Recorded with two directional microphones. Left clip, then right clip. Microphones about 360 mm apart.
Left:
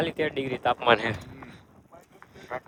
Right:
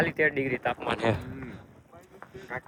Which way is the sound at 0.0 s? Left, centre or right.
Centre.